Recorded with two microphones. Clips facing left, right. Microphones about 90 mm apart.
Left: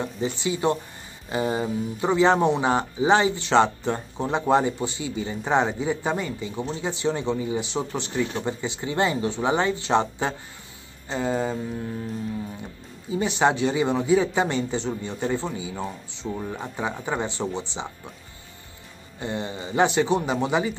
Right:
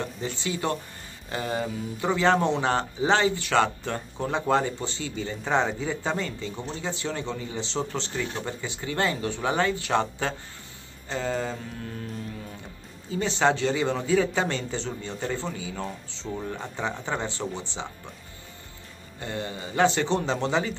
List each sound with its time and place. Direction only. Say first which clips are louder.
0.0 s speech: left 4 dB; 15° left (ahead or behind)
13.1 s speech: left 2 dB; 15° left (ahead or behind)
19.1 s speech: left 3 dB; 20° left (ahead or behind)